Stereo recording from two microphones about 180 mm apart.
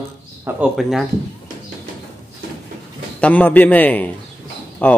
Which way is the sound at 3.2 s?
10° left (ahead or behind).